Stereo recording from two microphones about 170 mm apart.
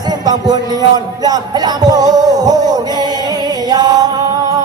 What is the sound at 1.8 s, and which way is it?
Music, 20° right (ahead or behind).